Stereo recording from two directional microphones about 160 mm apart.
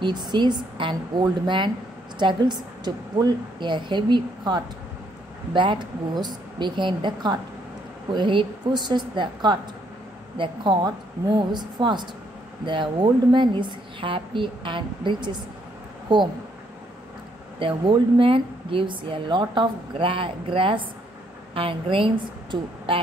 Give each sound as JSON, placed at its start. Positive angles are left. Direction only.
{"t": 0.0, "sound": "a woman's voice", "side_deg": -25}
{"t": 17.6, "sound": "speech", "side_deg": -30}